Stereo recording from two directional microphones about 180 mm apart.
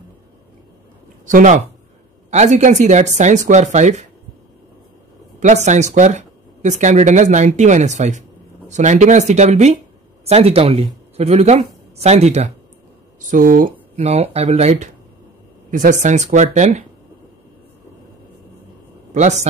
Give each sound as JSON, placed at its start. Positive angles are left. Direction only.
{"t": 1.2, "sound": "speech", "side_deg": -45}
{"t": 5.4, "sound": "speech", "side_deg": -40}
{"t": 13.9, "sound": "speech", "side_deg": -35}
{"t": 19.1, "sound": "a man's voice", "side_deg": -40}